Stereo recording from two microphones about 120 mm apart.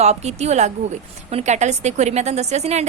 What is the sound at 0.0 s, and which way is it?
A woman's voice, 65° right (ahead or behind).